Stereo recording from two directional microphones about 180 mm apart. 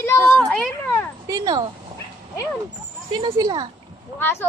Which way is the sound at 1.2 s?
20° right (ahead or behind).